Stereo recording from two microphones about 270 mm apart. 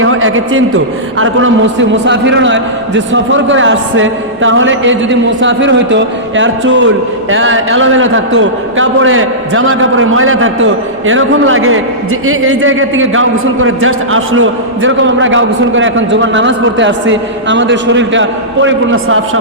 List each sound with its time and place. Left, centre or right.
0.0 s a man's voice: right